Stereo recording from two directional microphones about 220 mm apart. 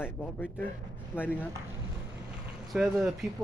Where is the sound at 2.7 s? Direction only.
Centre (ahead or behind).